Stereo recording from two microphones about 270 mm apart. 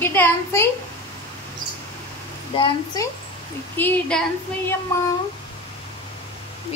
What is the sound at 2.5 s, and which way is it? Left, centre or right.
Speech, centre.